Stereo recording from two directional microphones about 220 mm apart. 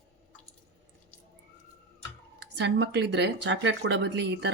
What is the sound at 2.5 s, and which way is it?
A woman's voice, 50° right (ahead or behind).